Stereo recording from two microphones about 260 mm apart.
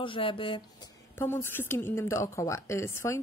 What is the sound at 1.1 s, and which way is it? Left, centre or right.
A woman's voice, centre.